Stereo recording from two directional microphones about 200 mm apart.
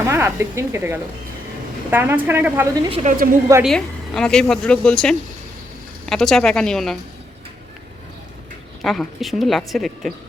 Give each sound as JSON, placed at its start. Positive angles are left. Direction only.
{"t": 0.0, "sound": "a woman's voice", "side_deg": -10}
{"t": 2.9, "sound": "a woman's voice", "side_deg": -35}
{"t": 3.6, "sound": "speech", "side_deg": 0}
{"t": 8.8, "sound": "speech", "side_deg": 0}